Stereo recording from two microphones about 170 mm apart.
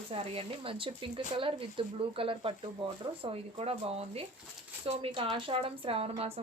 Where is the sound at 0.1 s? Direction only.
35° right (ahead or behind).